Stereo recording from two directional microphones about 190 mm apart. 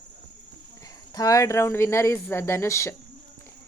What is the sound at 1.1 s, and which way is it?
Speech, 20° left (ahead or behind).